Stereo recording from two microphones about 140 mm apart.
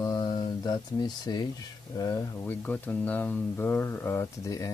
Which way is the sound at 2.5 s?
10° left (ahead or behind).